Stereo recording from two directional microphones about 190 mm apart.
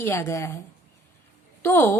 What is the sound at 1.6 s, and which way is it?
Speech, 10° left (ahead or behind).